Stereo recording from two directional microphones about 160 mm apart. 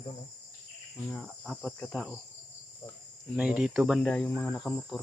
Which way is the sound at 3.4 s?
5° right (ahead or behind).